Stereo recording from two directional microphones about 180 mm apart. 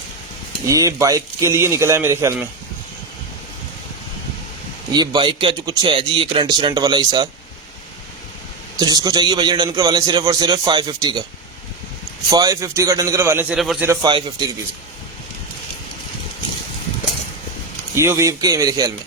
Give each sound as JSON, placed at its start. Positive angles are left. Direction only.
{"t": 0.6, "sound": "speech", "side_deg": -20}
{"t": 4.9, "sound": "a man's voice", "side_deg": -25}
{"t": 8.7, "sound": "a man's voice", "side_deg": -20}
{"t": 12.3, "sound": "speech", "side_deg": -20}
{"t": 13.8, "sound": "a man's voice", "side_deg": -20}
{"t": 17.9, "sound": "a man's voice", "side_deg": -15}